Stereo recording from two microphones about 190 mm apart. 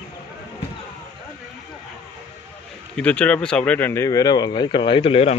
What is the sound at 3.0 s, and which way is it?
Speech, 5° left (ahead or behind).